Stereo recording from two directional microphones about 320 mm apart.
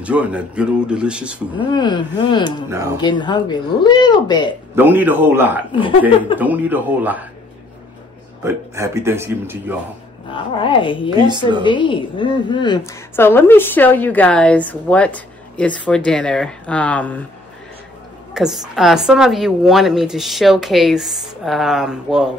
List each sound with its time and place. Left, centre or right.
0.0 s a woman's voice: centre
1.7 s speech: centre
4.7 s a man's voice: centre
5.7 s speech: centre
6.3 s a woman's voice: centre
8.5 s a man's voice: centre
10.3 s speech: centre
11.2 s a man's voice: centre
11.6 s a woman's voice: centre
18.3 s a woman's voice: centre